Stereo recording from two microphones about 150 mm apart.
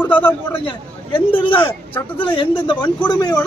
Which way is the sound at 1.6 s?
10° left (ahead or behind).